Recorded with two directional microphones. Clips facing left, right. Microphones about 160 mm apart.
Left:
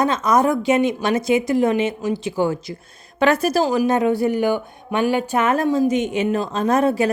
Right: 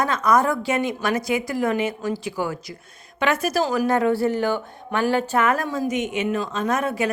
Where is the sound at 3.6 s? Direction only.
20° left (ahead or behind).